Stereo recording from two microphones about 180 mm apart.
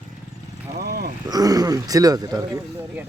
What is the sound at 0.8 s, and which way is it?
Speech, 60° right (ahead or behind).